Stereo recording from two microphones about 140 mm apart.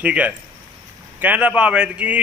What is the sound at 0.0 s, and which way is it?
A man's voice, 10° right (ahead or behind).